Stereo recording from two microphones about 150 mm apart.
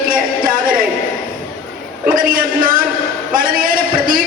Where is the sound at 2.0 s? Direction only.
70° right (ahead or behind).